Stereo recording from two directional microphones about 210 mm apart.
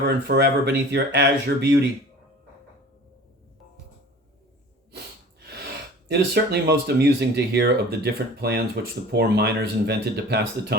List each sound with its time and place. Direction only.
0.3 s speech: 50° right (ahead or behind)
6.1 s speech: 55° right (ahead or behind)